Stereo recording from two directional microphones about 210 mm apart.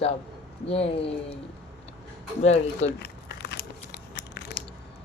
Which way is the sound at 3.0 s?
55° left (ahead or behind).